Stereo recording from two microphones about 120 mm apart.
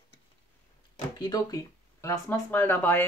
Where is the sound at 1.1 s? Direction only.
35° left (ahead or behind).